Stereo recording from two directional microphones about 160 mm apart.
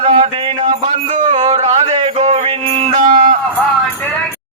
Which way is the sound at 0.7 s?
50° right (ahead or behind).